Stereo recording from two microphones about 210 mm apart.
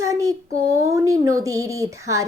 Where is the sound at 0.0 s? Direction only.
15° right (ahead or behind).